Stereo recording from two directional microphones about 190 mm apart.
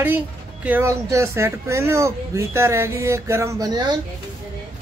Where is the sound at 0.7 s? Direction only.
15° right (ahead or behind).